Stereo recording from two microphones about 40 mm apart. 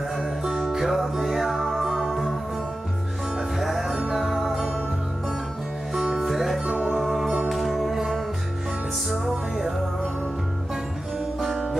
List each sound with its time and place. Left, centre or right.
0.2 s music: centre
3.5 s music: centre
4.0 s music: centre
4.3 s music: centre
6.2 s music: centre
9.1 s music: centre
11.4 s music: centre